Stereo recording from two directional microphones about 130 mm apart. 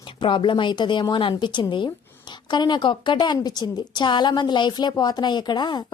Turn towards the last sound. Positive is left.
turn(degrees=35)  # may be behind; listen again after turning